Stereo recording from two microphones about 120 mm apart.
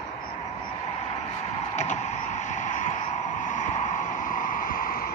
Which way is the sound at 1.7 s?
75° left (ahead or behind).